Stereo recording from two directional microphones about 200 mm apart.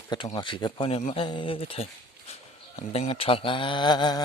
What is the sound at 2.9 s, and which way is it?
Speech, 30° left (ahead or behind).